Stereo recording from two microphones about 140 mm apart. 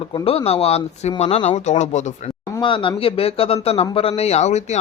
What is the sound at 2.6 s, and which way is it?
Speech, 35° left (ahead or behind).